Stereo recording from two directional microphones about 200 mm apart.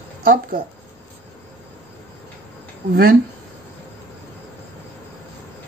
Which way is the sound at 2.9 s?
50° right (ahead or behind).